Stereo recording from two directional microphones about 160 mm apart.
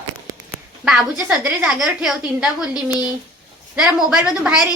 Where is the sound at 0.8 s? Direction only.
5° right (ahead or behind).